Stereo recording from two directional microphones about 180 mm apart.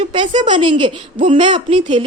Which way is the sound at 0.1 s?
25° right (ahead or behind).